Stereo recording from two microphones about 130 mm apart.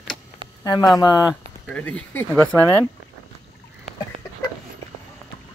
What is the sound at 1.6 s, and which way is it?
Speech, 10° left (ahead or behind).